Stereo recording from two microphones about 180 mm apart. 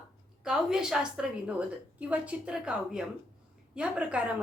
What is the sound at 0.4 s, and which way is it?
A woman's voice, 5° right (ahead or behind).